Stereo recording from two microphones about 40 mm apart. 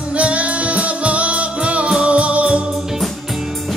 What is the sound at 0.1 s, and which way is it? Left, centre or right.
Music, right.